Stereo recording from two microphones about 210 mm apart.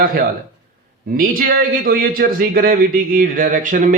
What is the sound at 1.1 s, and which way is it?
A man's voice, 40° right (ahead or behind).